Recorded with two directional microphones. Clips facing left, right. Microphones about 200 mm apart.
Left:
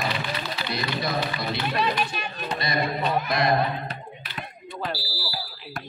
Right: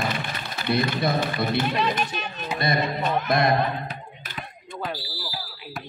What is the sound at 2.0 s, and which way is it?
Speech, 10° left (ahead or behind).